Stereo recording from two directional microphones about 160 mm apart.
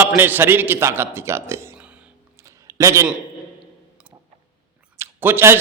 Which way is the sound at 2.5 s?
20° right (ahead or behind).